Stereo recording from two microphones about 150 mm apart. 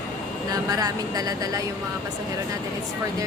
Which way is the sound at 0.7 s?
25° right (ahead or behind).